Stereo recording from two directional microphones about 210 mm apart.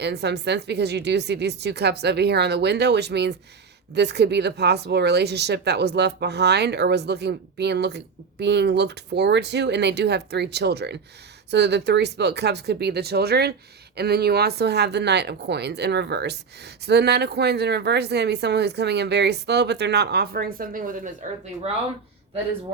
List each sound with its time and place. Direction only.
0.0 s speech: 55° right (ahead or behind); by 21.7 s 35° right (ahead or behind)